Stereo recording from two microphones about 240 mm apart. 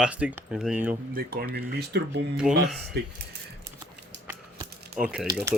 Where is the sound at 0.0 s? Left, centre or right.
Centre.